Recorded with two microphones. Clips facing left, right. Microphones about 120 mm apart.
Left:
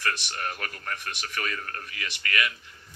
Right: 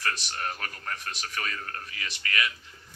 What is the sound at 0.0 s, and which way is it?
Speech, 35° right (ahead or behind).